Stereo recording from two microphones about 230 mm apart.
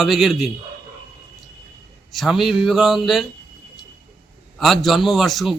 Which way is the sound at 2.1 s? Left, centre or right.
Centre.